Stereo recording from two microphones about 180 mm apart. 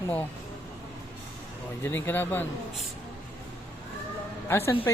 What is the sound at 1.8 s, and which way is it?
Speech, 10° left (ahead or behind).